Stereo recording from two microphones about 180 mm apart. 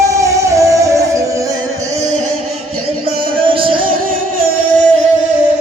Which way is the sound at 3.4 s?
30° right (ahead or behind).